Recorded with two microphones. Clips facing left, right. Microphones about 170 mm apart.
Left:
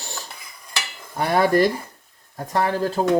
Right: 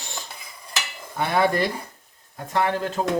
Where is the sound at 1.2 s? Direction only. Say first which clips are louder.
Left 4 dB; 40° left (ahead or behind).